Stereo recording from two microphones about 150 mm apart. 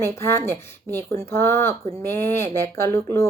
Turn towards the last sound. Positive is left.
turn(degrees=15)  # may be behind; listen again after turning